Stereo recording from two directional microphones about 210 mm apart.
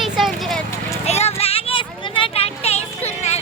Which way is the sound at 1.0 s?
30° left (ahead or behind).